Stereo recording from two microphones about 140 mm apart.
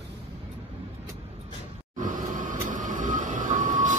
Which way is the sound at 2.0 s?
65° right (ahead or behind).